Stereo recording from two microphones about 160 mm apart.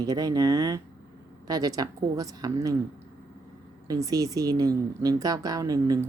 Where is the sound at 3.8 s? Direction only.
20° right (ahead or behind).